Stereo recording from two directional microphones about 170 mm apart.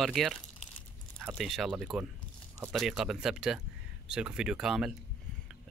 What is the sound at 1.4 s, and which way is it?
Speech, centre (ahead or behind).